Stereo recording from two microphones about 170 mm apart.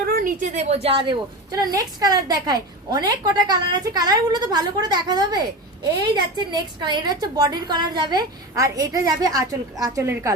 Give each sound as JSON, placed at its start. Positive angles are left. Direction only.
{"t": 0.1, "sound": "a woman's voice", "side_deg": -55}